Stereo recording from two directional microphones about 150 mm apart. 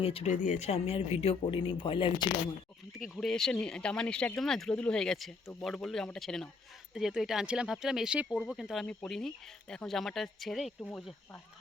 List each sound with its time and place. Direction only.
0.0 s speech: 40° left (ahead or behind)
0.3 s speech: 55° left (ahead or behind); by 2.3 s 30° left (ahead or behind)
3.2 s speech: centre (ahead or behind)